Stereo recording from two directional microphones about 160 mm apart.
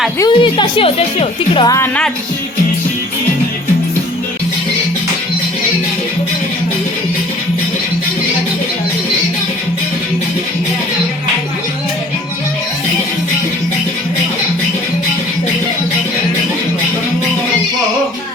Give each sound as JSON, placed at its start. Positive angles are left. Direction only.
{"t": 0.2, "sound": "a woman's voice", "side_deg": 30}
{"t": 1.6, "sound": "a woman's voice", "side_deg": 20}